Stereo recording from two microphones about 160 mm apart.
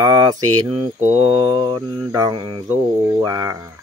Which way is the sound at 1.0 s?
40° right (ahead or behind).